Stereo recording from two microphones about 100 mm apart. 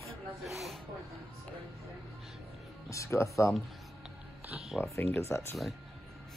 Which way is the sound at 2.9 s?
30° left (ahead or behind).